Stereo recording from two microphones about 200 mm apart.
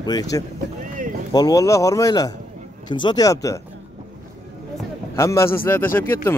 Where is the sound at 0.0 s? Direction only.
20° left (ahead or behind).